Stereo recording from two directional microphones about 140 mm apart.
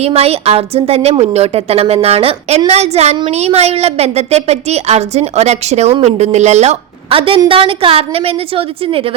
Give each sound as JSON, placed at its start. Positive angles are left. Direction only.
{"t": 0.0, "sound": "a woman's voice", "side_deg": -45}